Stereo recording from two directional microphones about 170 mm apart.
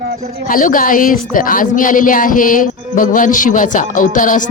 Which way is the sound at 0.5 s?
55° left (ahead or behind).